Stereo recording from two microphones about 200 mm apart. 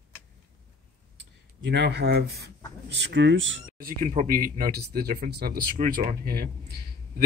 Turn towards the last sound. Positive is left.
turn(degrees=-50)  # may be behind; listen again after turning